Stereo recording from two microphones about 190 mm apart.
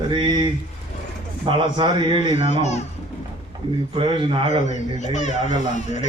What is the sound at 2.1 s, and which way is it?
Speech, 35° left (ahead or behind).